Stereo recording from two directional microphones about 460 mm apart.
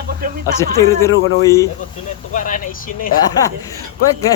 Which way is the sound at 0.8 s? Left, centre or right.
Centre.